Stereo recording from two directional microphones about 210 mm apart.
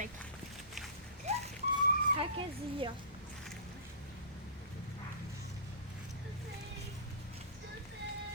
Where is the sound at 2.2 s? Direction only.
25° right (ahead or behind).